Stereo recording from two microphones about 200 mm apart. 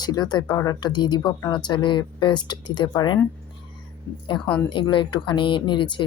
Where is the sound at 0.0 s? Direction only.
20° left (ahead or behind).